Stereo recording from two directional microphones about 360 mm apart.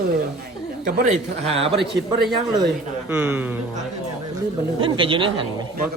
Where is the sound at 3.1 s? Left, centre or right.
Centre.